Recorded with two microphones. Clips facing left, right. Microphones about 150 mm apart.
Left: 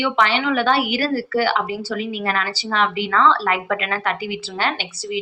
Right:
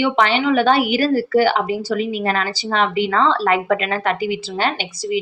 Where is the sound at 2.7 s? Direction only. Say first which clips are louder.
Right 2 dB; 30° right (ahead or behind).